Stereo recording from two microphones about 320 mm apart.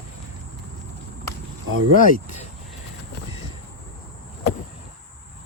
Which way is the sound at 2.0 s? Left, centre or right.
Left.